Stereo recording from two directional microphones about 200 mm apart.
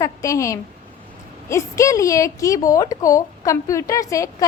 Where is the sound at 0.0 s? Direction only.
15° left (ahead or behind).